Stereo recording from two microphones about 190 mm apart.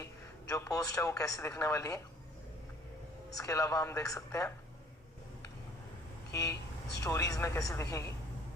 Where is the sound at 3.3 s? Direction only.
20° left (ahead or behind).